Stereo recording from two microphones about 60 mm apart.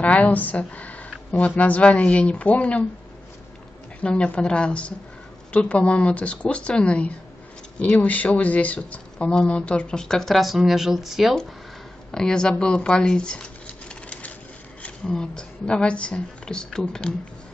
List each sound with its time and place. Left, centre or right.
0.0 s a woman's voice: left
4.0 s speech: centre
12.1 s speech: centre